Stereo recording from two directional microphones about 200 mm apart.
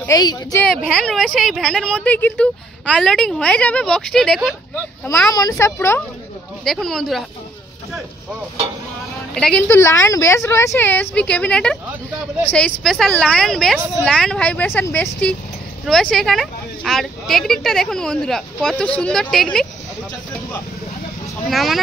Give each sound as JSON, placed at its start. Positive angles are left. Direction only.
{"t": 0.0, "sound": "speech", "side_deg": 20}
{"t": 0.9, "sound": "speech", "side_deg": 0}
{"t": 5.3, "sound": "speech", "side_deg": 15}
{"t": 6.6, "sound": "speech", "side_deg": 0}
{"t": 9.3, "sound": "speech", "side_deg": 5}
{"t": 21.5, "sound": "speech", "side_deg": 0}